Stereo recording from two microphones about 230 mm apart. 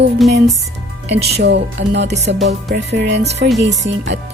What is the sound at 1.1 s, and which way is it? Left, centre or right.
Music, right.